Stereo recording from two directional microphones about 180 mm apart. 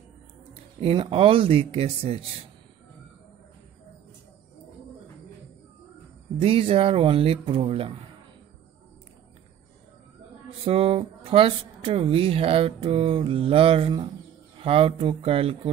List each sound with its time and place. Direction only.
0.7 s speech: 30° right (ahead or behind)
6.4 s speech: 30° right (ahead or behind)
10.6 s speech: 30° right (ahead or behind)